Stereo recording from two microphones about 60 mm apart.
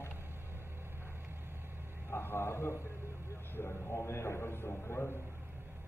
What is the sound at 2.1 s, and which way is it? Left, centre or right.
A man's voice, left.